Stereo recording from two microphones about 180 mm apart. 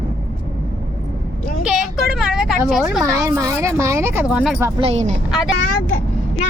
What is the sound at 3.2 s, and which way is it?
Speech, 15° right (ahead or behind).